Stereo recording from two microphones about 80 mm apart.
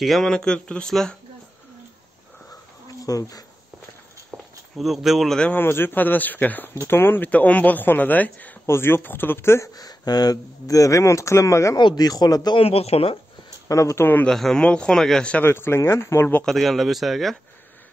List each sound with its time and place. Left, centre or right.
0.0 s speech: centre
3.0 s speech: left
4.7 s speech: centre
5.6 s a man's voice: left
7.2 s a man's voice: centre
8.6 s a man's voice: left
9.8 s speech: left
11.8 s speech: left
13.7 s speech: left
14.2 s speech: centre
15.4 s speech: left
16.4 s speech: centre